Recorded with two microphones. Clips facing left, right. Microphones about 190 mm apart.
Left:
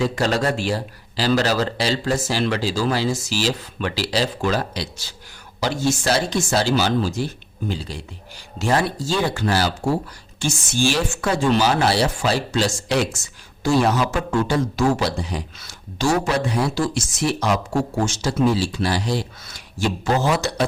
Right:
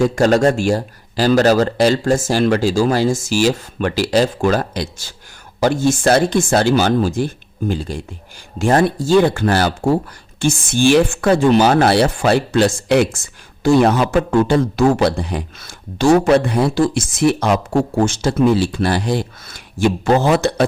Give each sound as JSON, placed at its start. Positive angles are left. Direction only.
{"t": 0.0, "sound": "speech", "side_deg": -45}